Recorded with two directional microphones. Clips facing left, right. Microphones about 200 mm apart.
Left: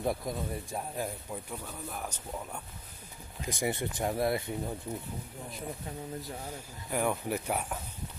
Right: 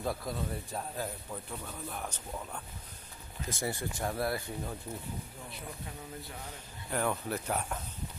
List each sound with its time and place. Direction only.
0.0 s speech: 20° left (ahead or behind)
6.4 s speech: 10° left (ahead or behind)